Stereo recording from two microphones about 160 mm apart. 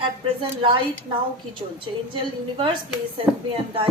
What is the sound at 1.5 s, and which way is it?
Speech, 30° right (ahead or behind).